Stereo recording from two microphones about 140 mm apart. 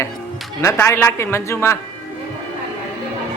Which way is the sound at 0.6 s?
20° left (ahead or behind).